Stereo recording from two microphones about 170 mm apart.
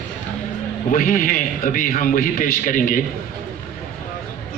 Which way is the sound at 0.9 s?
50° left (ahead or behind).